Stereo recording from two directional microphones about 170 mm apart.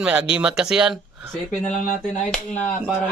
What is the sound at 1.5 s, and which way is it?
Speech, 45° left (ahead or behind).